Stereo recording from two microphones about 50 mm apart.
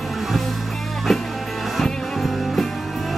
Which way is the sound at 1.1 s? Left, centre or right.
Centre.